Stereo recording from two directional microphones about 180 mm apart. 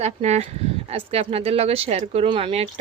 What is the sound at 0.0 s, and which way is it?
Speech, 40° right (ahead or behind).